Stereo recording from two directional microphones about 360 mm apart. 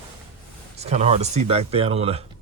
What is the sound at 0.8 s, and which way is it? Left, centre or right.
Speech, centre.